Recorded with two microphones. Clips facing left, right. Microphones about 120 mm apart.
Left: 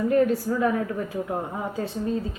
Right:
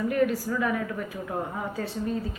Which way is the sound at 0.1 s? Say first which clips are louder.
Left 6 dB; 30° left (ahead or behind).